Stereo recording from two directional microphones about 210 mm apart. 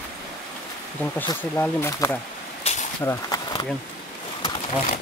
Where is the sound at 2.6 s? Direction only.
30° left (ahead or behind).